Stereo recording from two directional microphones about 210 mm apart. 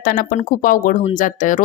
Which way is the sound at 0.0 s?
40° left (ahead or behind).